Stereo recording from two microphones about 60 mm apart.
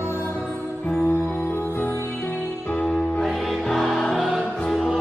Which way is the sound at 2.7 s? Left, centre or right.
Centre.